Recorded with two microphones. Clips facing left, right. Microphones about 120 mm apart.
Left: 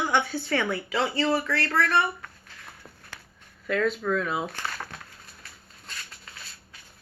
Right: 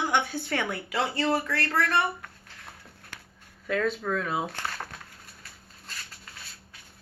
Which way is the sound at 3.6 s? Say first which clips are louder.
Left 2 dB; 35° right (ahead or behind).